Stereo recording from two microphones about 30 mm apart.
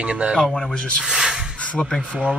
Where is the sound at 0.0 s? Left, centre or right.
Right.